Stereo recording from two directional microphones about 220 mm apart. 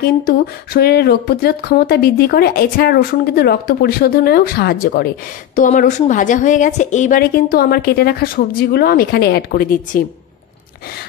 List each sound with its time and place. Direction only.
0.3 s a woman's voice: 45° left (ahead or behind)